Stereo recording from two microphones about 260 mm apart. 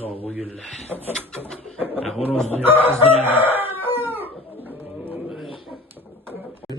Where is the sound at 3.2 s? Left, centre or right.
Centre.